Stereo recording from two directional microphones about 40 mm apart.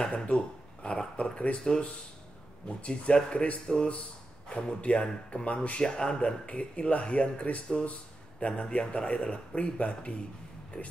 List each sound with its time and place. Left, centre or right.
0.0 s speech: left
2.8 s speech: left
7.8 s a sound: left
8.5 s speech: left